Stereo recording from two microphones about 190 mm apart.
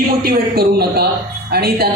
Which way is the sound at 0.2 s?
50° right (ahead or behind).